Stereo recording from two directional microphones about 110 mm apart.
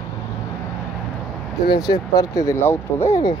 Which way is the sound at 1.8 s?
35° left (ahead or behind).